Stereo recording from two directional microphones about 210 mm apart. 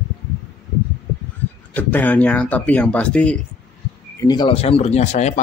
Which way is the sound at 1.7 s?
5° left (ahead or behind).